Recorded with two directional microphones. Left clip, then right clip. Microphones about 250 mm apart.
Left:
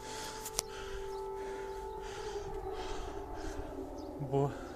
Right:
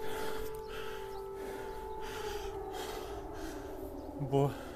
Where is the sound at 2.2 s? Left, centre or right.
Right.